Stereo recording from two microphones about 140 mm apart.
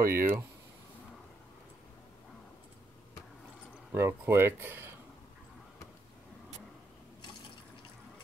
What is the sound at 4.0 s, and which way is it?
Speech, 15° right (ahead or behind).